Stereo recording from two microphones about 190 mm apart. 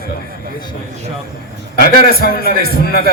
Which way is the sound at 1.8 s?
55° left (ahead or behind).